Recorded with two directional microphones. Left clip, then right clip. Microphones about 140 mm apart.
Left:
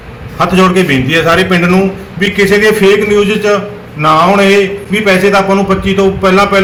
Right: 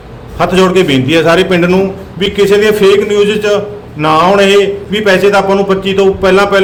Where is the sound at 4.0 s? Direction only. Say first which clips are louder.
Even; 25° right (ahead or behind).